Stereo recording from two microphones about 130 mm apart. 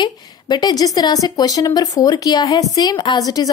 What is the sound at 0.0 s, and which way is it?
A woman's voice, 30° left (ahead or behind).